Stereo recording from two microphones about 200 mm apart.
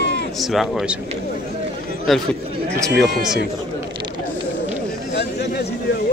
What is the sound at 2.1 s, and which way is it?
Speech, centre (ahead or behind).